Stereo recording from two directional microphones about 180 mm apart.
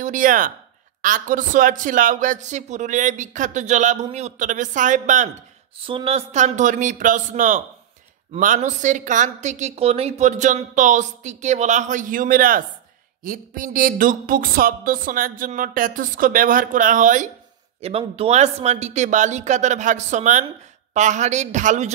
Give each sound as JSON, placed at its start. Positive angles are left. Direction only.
{"t": 0.0, "sound": "speech", "side_deg": -45}
{"t": 5.8, "sound": "a woman's voice", "side_deg": -30}
{"t": 17.7, "sound": "a woman's voice", "side_deg": -35}